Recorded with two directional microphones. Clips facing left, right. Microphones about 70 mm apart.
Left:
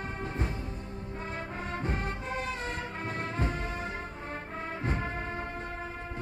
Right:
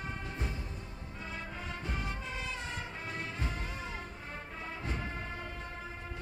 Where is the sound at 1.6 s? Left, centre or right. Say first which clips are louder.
Left 7 dB; left.